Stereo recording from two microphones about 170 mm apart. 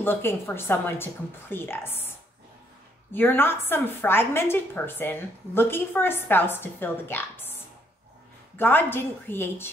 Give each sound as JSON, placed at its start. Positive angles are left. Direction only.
{"t": 0.0, "sound": "a woman's voice", "side_deg": 15}
{"t": 3.1, "sound": "a woman's voice", "side_deg": 10}
{"t": 8.5, "sound": "a woman's voice", "side_deg": 10}